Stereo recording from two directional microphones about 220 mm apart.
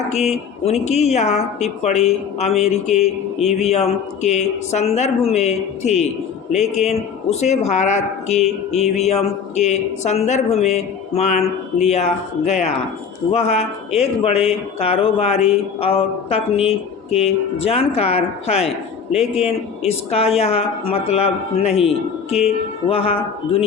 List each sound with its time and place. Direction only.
0.1 s a man's voice: 30° left (ahead or behind)